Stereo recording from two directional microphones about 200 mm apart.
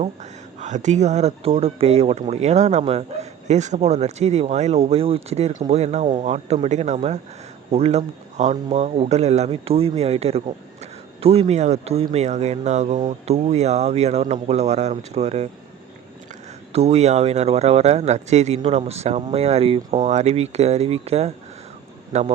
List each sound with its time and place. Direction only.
0.0 s speech: 35° right (ahead or behind)
16.7 s speech: 30° right (ahead or behind)